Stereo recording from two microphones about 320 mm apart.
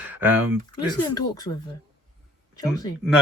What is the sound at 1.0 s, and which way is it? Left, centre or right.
Speech, centre.